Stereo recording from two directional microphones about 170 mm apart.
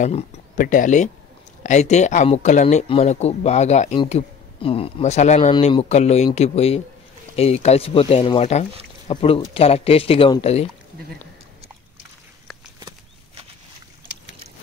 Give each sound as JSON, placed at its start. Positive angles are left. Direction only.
{"t": 0.0, "sound": "speech", "side_deg": 45}
{"t": 4.0, "sound": "speech", "side_deg": 30}
{"t": 12.8, "sound": "bird flight", "side_deg": -30}